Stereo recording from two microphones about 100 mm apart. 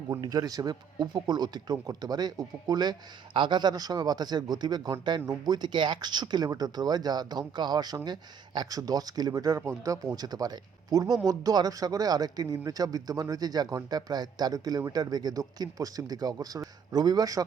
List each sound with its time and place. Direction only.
0.1 s speech: 40° right (ahead or behind)